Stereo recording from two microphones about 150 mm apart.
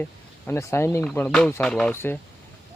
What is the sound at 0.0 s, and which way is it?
Speech, 15° left (ahead or behind).